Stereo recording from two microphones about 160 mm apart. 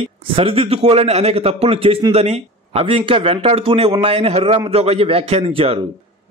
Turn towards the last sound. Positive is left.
turn(degrees=-35)  # may be behind; listen again after turning